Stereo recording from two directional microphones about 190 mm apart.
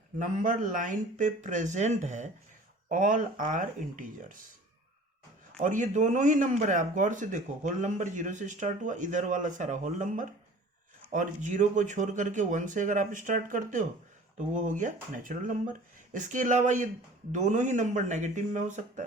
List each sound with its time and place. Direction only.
0.2 s a man's voice: 45° right (ahead or behind)
5.5 s a man's voice: 40° right (ahead or behind)